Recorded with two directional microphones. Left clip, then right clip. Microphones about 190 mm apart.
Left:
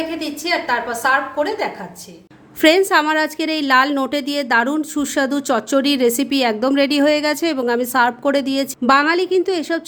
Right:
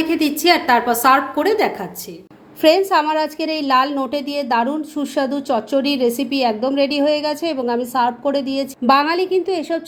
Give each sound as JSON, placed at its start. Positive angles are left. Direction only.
{"t": 0.0, "sound": "a woman's voice", "side_deg": -35}
{"t": 2.6, "sound": "a woman's voice", "side_deg": 30}
{"t": 8.9, "sound": "a woman's voice", "side_deg": 20}